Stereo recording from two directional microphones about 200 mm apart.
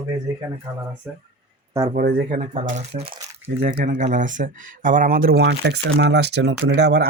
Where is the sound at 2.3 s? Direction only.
35° right (ahead or behind).